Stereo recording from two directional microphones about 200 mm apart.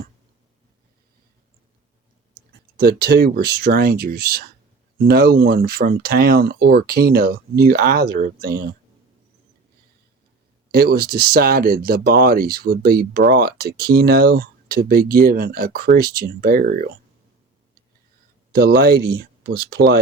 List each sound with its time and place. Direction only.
2.7 s speech: 50° right (ahead or behind)
10.7 s speech: 50° right (ahead or behind)
18.5 s speech: 50° right (ahead or behind)